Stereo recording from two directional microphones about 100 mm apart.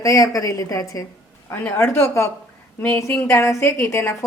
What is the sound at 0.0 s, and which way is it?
A woman's voice, 35° left (ahead or behind).